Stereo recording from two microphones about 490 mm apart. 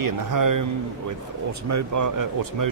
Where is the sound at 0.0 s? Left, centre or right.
Right.